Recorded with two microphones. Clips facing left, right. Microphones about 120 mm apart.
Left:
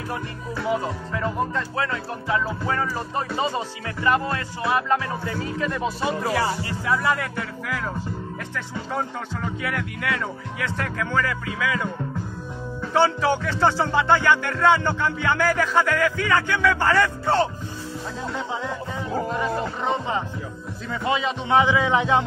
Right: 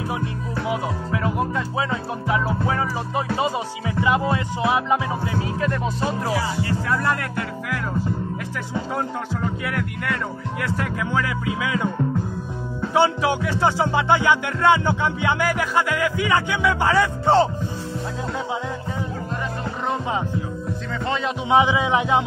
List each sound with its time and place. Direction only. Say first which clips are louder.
0.7 s music: left 1 dB; 5° right (ahead or behind)
1.8 s music: right 2 dB; 15° right (ahead or behind)
5.3 s speech: right 3 dB; centre (ahead or behind)
8.9 s speech: left 1 dB; centre (ahead or behind); by 11.9 s 20° right (ahead or behind)
12.9 s music: right 1 dB; 10° right (ahead or behind)
21.5 s music: right 1 dB; 15° right (ahead or behind)